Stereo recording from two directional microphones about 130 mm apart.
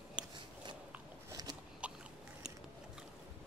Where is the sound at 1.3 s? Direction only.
30° right (ahead or behind).